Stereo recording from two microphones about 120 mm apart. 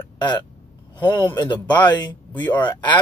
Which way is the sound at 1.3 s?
35° left (ahead or behind).